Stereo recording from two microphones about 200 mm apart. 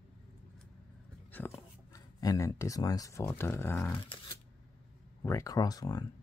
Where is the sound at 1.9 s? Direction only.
15° left (ahead or behind).